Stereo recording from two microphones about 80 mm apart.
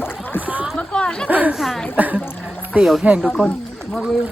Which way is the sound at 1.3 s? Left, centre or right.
Centre.